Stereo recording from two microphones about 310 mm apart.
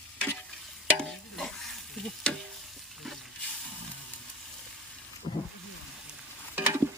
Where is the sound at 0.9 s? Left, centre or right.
Centre.